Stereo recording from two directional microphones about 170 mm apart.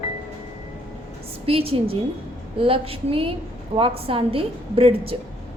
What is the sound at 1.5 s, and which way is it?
A woman's voice, 35° right (ahead or behind).